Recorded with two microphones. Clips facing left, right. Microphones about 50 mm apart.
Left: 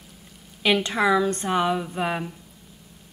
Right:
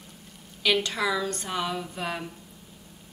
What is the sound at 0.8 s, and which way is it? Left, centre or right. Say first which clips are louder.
A woman's voice: left 7 dB; left.